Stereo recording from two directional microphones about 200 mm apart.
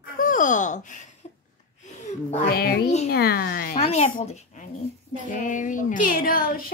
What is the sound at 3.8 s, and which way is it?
Speech, 30° left (ahead or behind).